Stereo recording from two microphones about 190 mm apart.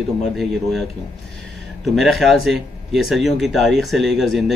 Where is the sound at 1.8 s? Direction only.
Centre (ahead or behind).